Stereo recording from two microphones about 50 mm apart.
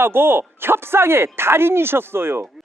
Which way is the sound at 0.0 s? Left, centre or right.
Right.